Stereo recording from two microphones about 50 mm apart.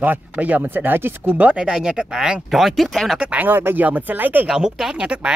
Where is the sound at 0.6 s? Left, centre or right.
Right.